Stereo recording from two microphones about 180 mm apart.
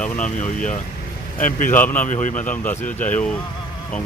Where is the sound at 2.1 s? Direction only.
45° left (ahead or behind).